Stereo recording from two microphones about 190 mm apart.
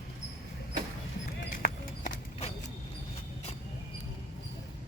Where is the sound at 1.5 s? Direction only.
45° left (ahead or behind).